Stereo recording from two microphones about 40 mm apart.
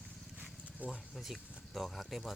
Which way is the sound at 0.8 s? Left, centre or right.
Right.